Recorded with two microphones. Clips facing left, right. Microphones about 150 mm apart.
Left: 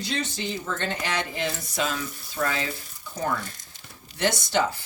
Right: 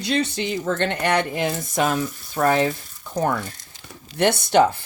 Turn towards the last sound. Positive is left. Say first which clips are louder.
# right 8 dB
turn(degrees=-60)  # may be behind; listen again after turning